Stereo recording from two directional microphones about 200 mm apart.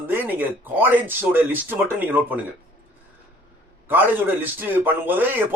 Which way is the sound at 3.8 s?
10° right (ahead or behind).